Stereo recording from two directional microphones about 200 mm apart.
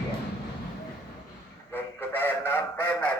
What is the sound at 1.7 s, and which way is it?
Speech, 10° left (ahead or behind).